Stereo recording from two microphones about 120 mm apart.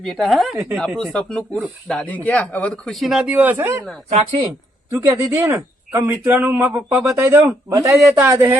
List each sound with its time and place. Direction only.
0.0 s speech: centre (ahead or behind); by 3.8 s 20° right (ahead or behind)
4.1 s speech: 65° right (ahead or behind)
4.9 s speech: 20° right (ahead or behind)
7.0 s speech: 20° right (ahead or behind)